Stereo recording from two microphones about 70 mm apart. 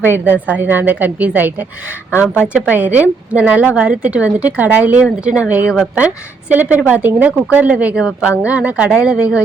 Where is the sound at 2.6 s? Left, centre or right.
Right.